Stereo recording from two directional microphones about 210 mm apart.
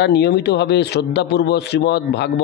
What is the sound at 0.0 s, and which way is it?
A man's voice, 55° left (ahead or behind).